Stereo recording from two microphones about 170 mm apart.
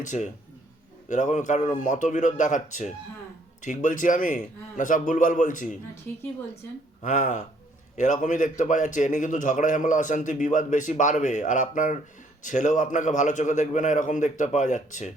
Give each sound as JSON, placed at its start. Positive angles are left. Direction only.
{"t": 0.0, "sound": "speech", "side_deg": 45}
{"t": 7.0, "sound": "speech", "side_deg": 45}